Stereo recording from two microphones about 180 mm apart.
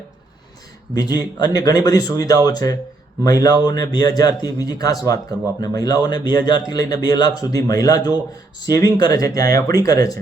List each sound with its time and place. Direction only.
0.9 s a man's voice: 20° left (ahead or behind)